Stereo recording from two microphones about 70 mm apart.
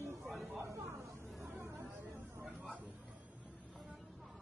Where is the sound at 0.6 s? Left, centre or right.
Right.